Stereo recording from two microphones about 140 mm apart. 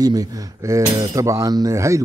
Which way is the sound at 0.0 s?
25° right (ahead or behind).